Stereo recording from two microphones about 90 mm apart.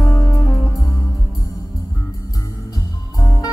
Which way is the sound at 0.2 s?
40° left (ahead or behind).